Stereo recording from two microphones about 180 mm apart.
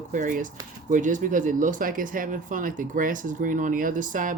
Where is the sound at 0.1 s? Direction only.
45° right (ahead or behind).